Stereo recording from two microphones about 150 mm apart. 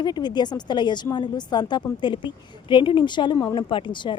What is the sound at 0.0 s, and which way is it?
A woman's voice, 30° left (ahead or behind).